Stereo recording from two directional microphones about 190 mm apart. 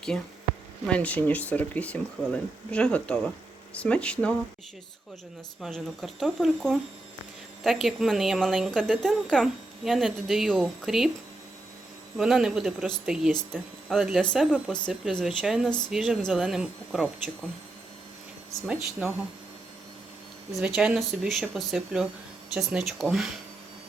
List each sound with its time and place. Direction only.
0.9 s a woman's voice: 5° left (ahead or behind)
5.6 s a woman's voice: centre (ahead or behind)
12.1 s a woman's voice: 5° right (ahead or behind)
18.7 s a woman's voice: 5° right (ahead or behind)
20.5 s a woman's voice: centre (ahead or behind)